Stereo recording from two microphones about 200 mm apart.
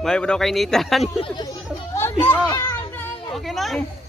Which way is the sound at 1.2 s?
20° left (ahead or behind).